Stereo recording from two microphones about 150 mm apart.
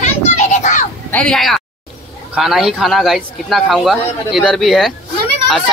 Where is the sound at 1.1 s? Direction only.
5° left (ahead or behind).